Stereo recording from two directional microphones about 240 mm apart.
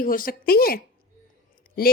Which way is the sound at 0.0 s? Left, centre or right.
Left.